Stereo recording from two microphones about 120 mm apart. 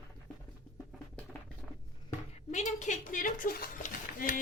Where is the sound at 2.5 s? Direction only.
80° left.